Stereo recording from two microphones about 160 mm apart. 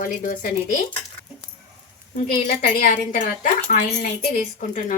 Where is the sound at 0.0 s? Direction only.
55° left (ahead or behind).